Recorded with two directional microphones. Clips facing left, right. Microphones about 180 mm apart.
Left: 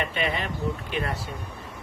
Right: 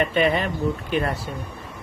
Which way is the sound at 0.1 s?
45° right (ahead or behind).